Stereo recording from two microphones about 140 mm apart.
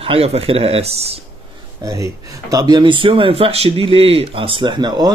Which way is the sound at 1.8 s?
25° right (ahead or behind).